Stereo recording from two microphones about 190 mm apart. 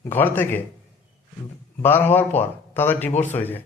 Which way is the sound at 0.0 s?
10° left (ahead or behind).